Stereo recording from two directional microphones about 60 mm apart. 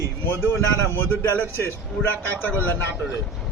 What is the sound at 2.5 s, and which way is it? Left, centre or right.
Speech, left.